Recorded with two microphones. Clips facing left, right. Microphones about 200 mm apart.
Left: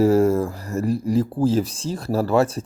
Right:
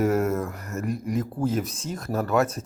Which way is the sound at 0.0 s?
30° left (ahead or behind).